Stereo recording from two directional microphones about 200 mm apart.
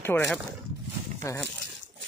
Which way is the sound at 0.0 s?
10° left (ahead or behind).